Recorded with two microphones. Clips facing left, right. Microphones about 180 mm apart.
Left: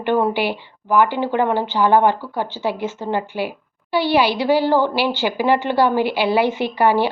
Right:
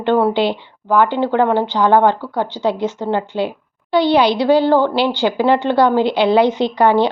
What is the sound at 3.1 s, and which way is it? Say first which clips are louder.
A woman's voice: right 2 dB; 10° left (ahead or behind).